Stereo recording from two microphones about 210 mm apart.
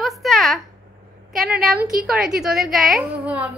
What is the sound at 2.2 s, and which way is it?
A woman's voice, centre (ahead or behind).